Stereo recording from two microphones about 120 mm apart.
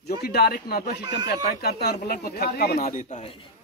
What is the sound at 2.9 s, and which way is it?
Speech, 90° left.